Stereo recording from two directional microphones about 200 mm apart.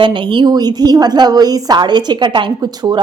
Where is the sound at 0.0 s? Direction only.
25° right (ahead or behind).